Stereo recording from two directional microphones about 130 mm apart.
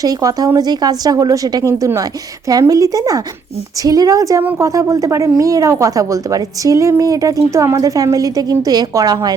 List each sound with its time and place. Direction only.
0.0 s a woman's voice: 25° right (ahead or behind)